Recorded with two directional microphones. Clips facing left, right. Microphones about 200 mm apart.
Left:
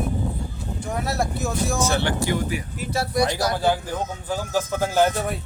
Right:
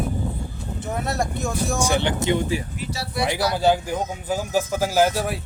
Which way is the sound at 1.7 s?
15° right (ahead or behind).